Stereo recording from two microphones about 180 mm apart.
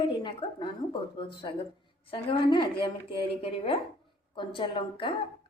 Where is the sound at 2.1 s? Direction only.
25° left (ahead or behind).